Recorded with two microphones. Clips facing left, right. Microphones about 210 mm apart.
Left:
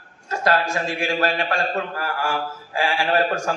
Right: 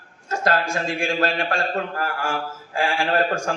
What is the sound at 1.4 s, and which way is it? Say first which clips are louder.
A man's voice: even; 45° right (ahead or behind).